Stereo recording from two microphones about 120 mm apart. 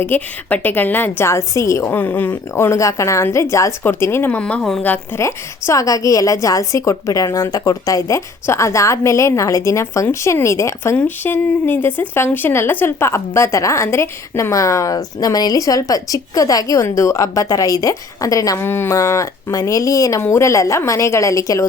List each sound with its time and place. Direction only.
0.0 s a woman's voice: 15° left (ahead or behind)
2.0 s a woman's voice: 15° left (ahead or behind)
4.8 s a woman's voice: 20° left (ahead or behind)